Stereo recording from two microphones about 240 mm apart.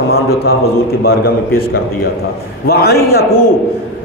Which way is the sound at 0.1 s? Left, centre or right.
Left.